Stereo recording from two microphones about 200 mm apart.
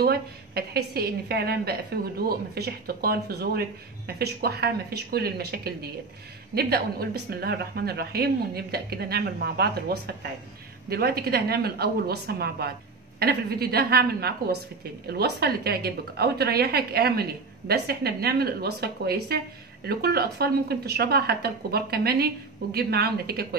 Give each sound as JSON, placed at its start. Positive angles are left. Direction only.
{"t": 0.0, "sound": "a woman's voice", "side_deg": -50}